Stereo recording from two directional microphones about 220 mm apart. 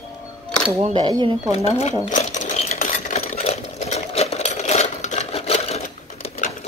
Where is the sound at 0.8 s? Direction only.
25° right (ahead or behind).